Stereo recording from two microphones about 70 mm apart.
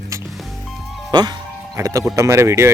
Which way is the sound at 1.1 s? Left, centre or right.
Right.